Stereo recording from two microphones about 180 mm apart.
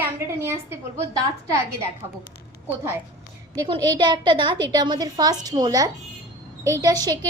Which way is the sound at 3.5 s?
25° right (ahead or behind).